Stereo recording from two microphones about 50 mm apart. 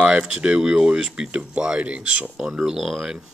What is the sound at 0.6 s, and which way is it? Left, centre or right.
Speech, centre.